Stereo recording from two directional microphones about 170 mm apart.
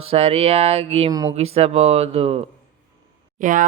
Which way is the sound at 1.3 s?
35° right (ahead or behind).